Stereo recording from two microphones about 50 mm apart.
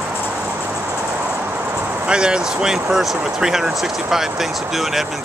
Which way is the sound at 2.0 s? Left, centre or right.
Centre.